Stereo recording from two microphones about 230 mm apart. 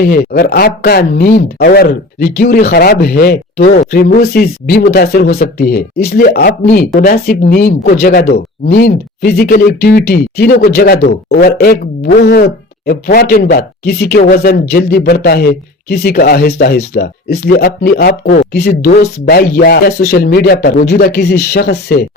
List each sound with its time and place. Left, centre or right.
0.0 s speech: left